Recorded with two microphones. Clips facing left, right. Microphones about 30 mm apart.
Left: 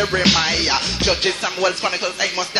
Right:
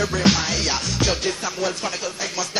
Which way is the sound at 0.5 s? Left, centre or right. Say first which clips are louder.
Left 4 dB; left.